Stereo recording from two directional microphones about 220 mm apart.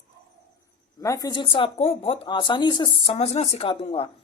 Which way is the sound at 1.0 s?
15° left (ahead or behind).